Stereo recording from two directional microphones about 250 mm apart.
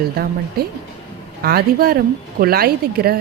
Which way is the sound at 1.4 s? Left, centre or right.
Right.